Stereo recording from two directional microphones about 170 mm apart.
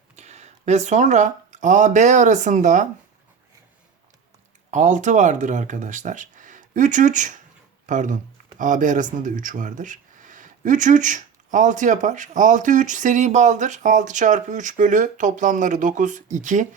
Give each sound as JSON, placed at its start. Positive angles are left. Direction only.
{"t": 0.2, "sound": "speech", "side_deg": -40}
{"t": 4.7, "sound": "speech", "side_deg": -45}